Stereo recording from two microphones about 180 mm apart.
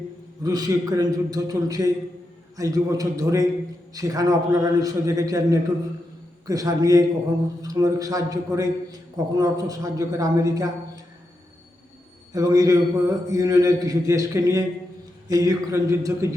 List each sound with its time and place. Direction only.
0.4 s a man's voice: 20° right (ahead or behind)
12.3 s a man's voice: 20° right (ahead or behind)